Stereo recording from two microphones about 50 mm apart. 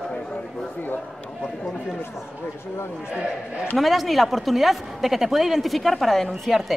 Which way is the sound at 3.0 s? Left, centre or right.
Centre.